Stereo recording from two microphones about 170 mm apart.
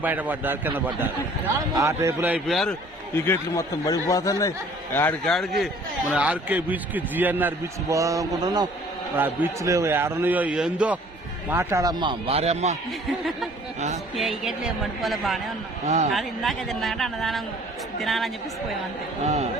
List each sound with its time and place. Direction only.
0.0 s a man's voice: 10° right (ahead or behind)
2.5 s speech: centre (ahead or behind)
3.2 s speech: 15° left (ahead or behind)
4.9 s a man's voice: 10° left (ahead or behind); by 8.6 s 25° right (ahead or behind)
9.1 s a man's voice: 10° right (ahead or behind); by 12.7 s 40° right (ahead or behind)
13.1 s speech: centre (ahead or behind)
13.7 s a sound: 45° right (ahead or behind)
14.2 s speech: centre (ahead or behind)
19.2 s a man's voice: 40° right (ahead or behind)